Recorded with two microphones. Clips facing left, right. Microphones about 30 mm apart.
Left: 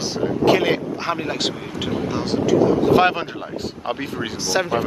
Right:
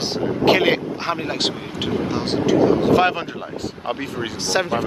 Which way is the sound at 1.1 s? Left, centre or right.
Centre.